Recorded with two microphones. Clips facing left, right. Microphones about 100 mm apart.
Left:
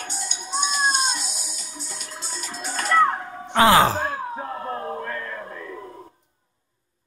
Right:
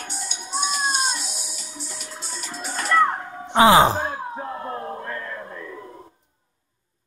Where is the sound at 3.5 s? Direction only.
20° right (ahead or behind).